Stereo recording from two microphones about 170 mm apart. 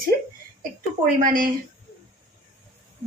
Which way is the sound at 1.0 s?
55° right (ahead or behind).